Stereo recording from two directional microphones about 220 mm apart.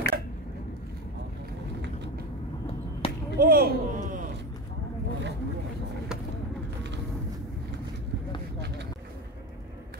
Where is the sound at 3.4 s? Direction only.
45° right (ahead or behind).